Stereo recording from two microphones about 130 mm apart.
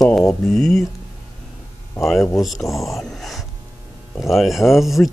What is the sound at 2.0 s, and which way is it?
Speech, centre (ahead or behind).